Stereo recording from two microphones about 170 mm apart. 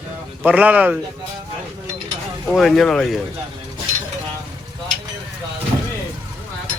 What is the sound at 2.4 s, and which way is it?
Speech, centre (ahead or behind).